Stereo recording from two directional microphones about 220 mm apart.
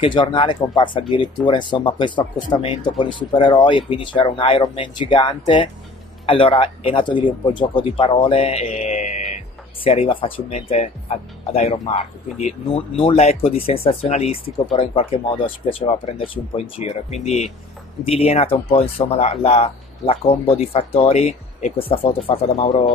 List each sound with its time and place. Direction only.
0.0 s speech: 20° left (ahead or behind)